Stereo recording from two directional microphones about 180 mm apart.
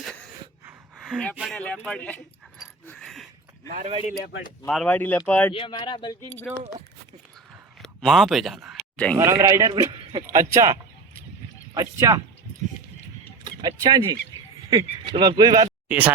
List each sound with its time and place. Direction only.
1.0 s speech: 5° left (ahead or behind)
2.8 s a sound: 5° left (ahead or behind)
4.7 s speech: 5° left (ahead or behind)
5.5 s speech: 25° left (ahead or behind)
7.8 s a sound: centre (ahead or behind)
9.1 s a man's voice: 15° right (ahead or behind)
10.2 s a sound: 15° right (ahead or behind)
11.7 s speech: 20° right (ahead or behind)
13.4 s speech: 20° right (ahead or behind)
15.9 s a man's voice: 10° right (ahead or behind)